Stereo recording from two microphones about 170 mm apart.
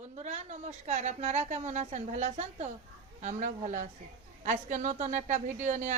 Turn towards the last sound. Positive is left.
turn(degrees=-45)  # may be behind; listen again after turning